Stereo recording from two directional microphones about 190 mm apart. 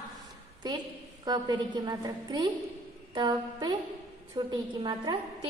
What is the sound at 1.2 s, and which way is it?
A woman's voice, 20° right (ahead or behind).